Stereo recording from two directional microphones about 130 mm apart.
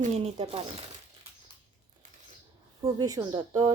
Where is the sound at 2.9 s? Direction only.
25° right (ahead or behind).